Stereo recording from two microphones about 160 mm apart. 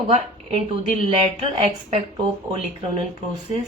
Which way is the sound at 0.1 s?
40° right (ahead or behind).